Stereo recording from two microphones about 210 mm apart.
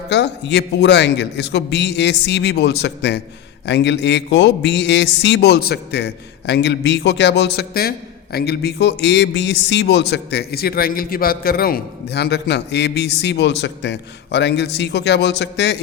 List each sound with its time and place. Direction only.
0.1 s a man's voice: 55° left (ahead or behind)